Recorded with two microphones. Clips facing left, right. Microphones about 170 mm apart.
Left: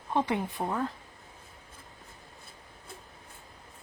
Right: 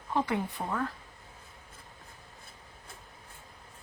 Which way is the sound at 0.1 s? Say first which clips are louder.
Left 1 dB; 20° left (ahead or behind).